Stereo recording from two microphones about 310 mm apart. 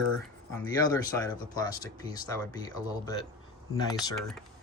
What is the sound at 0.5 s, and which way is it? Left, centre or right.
Speech, centre.